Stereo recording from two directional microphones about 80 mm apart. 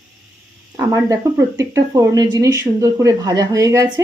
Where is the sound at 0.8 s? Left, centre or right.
Right.